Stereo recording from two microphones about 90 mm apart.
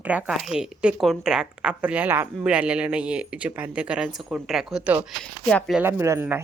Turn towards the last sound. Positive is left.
turn(degrees=-30)  # may be behind; listen again after turning